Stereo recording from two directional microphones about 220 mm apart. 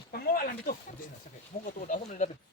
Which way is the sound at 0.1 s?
45° left (ahead or behind).